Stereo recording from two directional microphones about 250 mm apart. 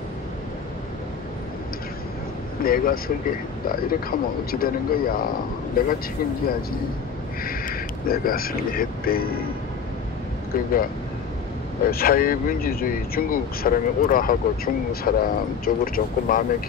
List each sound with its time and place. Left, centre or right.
2.6 s speech: left
7.4 s speech: left
10.5 s speech: left
11.9 s speech: left